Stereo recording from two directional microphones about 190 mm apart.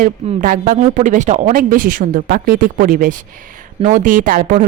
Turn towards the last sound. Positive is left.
turn(degrees=-45)  # may be behind; listen again after turning